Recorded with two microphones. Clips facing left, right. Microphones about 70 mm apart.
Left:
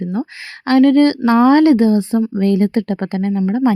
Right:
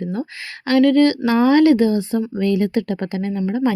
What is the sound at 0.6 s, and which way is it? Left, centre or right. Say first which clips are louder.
A woman's voice: left 3 dB; left.